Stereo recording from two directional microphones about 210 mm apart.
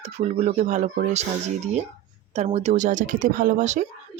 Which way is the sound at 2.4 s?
30° right (ahead or behind).